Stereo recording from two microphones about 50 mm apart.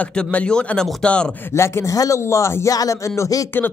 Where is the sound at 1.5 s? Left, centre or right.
Left.